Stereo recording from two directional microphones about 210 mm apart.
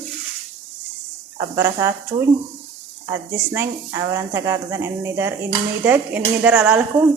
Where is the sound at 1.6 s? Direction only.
10° right (ahead or behind).